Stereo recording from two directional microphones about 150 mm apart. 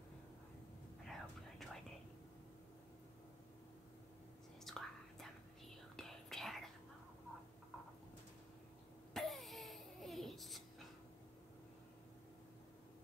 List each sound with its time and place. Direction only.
1.0 s whispering: centre (ahead or behind)
4.6 s whispering: centre (ahead or behind)
9.1 s hiccup: centre (ahead or behind)